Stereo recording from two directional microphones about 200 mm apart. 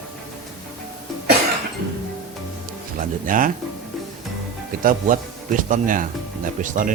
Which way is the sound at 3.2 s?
45° right (ahead or behind).